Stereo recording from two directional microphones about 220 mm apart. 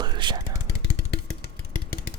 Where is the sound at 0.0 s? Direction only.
20° right (ahead or behind).